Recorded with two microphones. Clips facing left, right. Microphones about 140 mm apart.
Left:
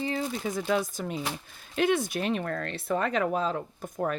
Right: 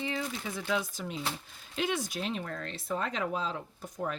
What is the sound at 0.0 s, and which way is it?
Speech, 40° left (ahead or behind).